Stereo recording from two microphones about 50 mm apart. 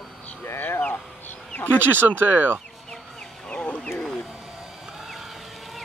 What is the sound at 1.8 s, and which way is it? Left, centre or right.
Speech, right.